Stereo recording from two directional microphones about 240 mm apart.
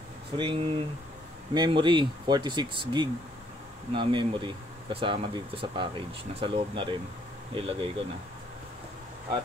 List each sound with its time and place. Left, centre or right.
0.4 s speech: right